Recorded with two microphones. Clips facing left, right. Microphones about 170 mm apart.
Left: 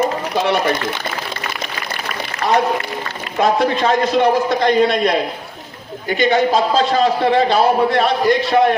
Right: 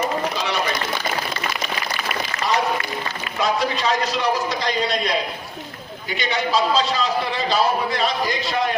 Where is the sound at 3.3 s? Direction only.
55° left (ahead or behind).